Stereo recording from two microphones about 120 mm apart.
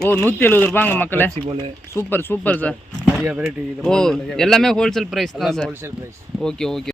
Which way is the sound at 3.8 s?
5° left (ahead or behind).